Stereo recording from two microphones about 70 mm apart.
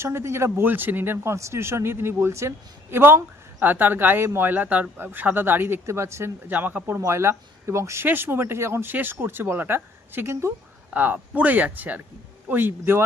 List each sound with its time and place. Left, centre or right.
0.0 s speech: right
0.7 s speech: right
5.8 s speech: right
6.5 s speech: right
7.0 s speech: right
8.0 s speech: right